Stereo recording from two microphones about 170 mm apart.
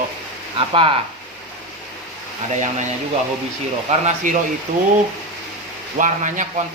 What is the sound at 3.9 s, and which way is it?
Speech, 40° right (ahead or behind).